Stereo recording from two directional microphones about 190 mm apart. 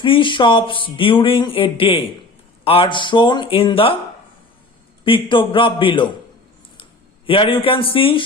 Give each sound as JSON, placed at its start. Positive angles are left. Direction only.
{"t": 0.0, "sound": "speech", "side_deg": 25}
{"t": 5.0, "sound": "speech", "side_deg": 25}
{"t": 7.3, "sound": "speech", "side_deg": 25}